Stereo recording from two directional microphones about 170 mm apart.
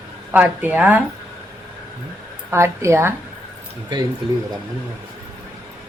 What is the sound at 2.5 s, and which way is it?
Speech, 15° right (ahead or behind).